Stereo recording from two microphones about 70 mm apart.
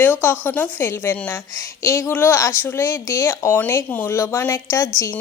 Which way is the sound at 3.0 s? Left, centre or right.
Left.